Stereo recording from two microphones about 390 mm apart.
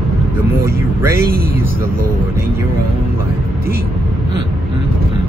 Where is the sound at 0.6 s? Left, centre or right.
Centre.